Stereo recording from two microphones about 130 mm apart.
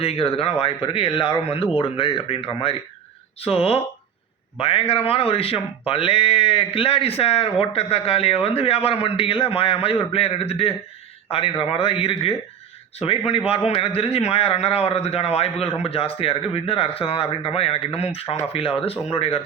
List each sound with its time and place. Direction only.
0.0 s speech: 50° left (ahead or behind)